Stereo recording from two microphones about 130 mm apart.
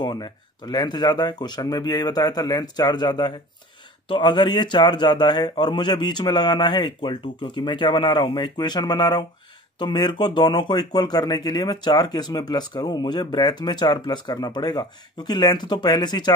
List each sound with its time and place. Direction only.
0.0 s speech: 35° left (ahead or behind)